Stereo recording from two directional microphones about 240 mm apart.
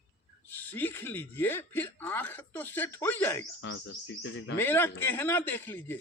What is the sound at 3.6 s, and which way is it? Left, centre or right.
Speech, left.